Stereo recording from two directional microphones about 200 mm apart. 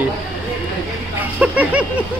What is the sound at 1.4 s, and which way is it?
Speech, 5° right (ahead or behind).